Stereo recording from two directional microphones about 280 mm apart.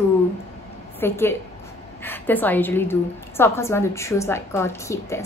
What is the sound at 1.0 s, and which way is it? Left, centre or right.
A woman's voice, centre.